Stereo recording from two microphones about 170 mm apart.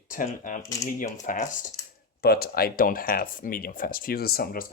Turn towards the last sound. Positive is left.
turn(degrees=60)  # may be behind; listen again after turning